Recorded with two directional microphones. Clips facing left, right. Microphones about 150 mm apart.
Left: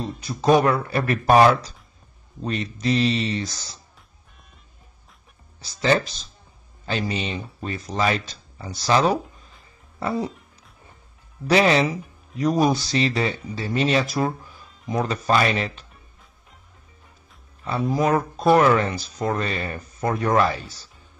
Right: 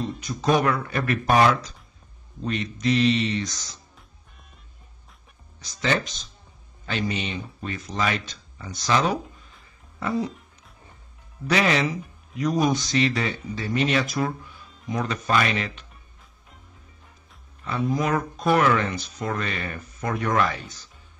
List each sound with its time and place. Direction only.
0.2 s speech: 30° left (ahead or behind)
5.6 s speech: 35° left (ahead or behind)
9.9 s music: 35° left (ahead or behind)
11.4 s speech: 30° left (ahead or behind)
17.9 s speech: 35° left (ahead or behind)